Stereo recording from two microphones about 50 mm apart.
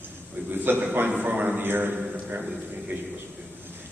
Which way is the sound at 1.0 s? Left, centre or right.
Right.